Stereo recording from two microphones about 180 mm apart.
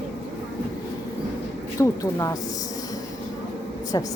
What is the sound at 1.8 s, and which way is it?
Speech, 20° left (ahead or behind).